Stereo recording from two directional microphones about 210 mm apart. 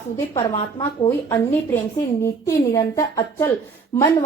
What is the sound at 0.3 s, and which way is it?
Speech, 30° left (ahead or behind).